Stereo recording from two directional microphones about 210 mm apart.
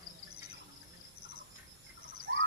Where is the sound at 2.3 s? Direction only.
60° right (ahead or behind).